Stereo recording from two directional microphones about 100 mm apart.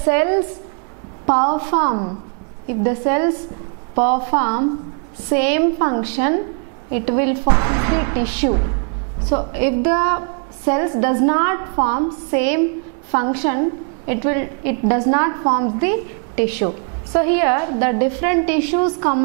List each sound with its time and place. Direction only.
0.0 s a woman's voice: 10° right (ahead or behind)